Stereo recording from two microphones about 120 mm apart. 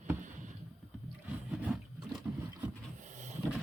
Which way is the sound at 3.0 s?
85° right.